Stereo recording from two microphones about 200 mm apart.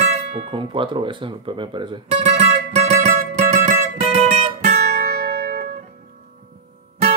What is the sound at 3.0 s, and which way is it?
Music, 40° right (ahead or behind).